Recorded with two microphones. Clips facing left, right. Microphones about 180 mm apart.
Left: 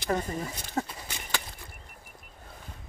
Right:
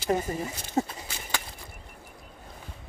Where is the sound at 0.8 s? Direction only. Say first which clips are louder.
Right 4 dB; 25° right (ahead or behind).